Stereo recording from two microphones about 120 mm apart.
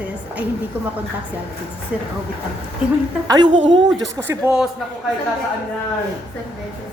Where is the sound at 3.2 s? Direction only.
40° right (ahead or behind).